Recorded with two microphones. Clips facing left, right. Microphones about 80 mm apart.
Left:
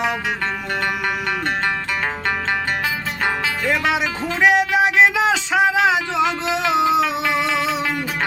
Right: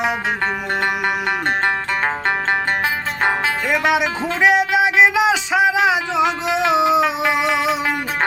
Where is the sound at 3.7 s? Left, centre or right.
Centre.